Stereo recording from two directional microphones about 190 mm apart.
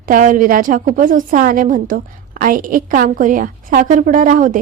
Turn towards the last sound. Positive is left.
turn(degrees=-45)  # may be behind; listen again after turning